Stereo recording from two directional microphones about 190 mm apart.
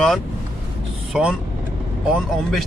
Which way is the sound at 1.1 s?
5° right (ahead or behind).